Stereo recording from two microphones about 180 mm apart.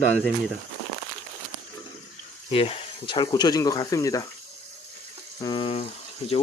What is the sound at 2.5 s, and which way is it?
Speech, 30° left (ahead or behind).